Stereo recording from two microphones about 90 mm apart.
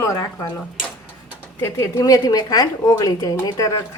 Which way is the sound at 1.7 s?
45° left (ahead or behind).